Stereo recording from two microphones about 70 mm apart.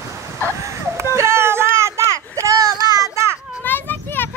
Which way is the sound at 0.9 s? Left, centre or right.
Right.